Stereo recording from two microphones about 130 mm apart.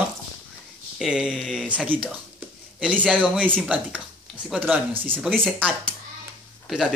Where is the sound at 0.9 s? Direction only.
5° right (ahead or behind).